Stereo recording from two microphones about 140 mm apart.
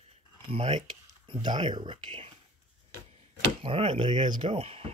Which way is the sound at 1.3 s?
35° right (ahead or behind).